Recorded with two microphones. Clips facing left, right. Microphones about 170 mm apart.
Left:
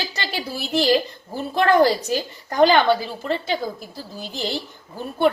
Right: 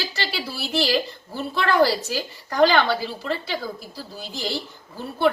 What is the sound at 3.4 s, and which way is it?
Speech, 50° left (ahead or behind).